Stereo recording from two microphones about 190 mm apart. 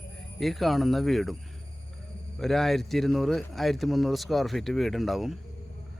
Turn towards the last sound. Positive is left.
turn(degrees=0)  # may be behind; listen again after turning